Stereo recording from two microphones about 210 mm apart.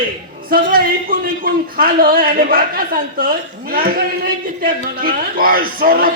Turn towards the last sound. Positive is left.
turn(degrees=-45)  # may be behind; listen again after turning